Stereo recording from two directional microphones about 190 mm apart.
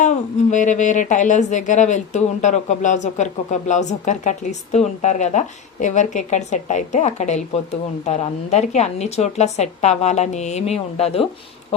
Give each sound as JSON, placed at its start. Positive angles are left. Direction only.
{"t": 0.0, "sound": "a woman's voice", "side_deg": 40}